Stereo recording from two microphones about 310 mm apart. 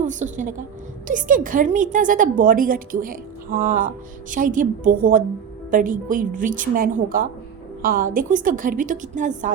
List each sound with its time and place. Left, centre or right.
0.0 s a woman's voice: right